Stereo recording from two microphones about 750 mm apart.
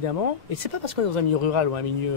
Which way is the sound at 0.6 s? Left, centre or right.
Right.